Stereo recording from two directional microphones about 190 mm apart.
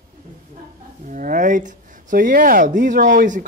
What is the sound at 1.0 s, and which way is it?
Speech, 45° right (ahead or behind).